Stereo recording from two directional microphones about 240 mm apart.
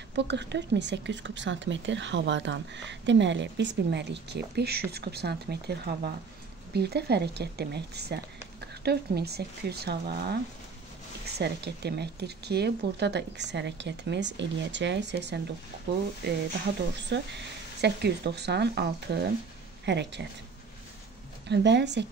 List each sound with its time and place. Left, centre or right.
0.1 s speech: right
17.1 s speech: right
21.5 s speech: right